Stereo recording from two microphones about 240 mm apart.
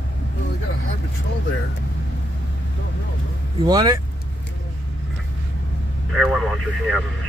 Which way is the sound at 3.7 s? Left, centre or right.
Centre.